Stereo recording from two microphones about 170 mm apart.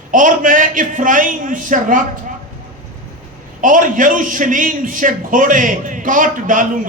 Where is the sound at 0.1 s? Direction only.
50° right (ahead or behind).